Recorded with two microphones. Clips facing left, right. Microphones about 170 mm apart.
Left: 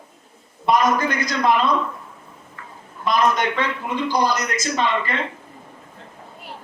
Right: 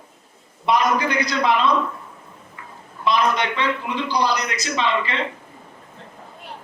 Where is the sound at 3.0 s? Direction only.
45° left (ahead or behind).